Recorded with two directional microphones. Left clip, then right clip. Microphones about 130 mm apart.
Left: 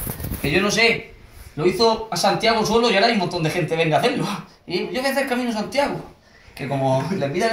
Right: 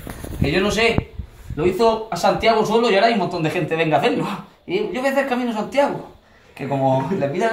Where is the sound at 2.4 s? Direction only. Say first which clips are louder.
Right 2 dB; 5° left (ahead or behind).